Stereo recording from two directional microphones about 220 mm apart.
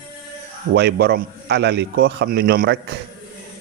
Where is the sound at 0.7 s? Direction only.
50° right (ahead or behind).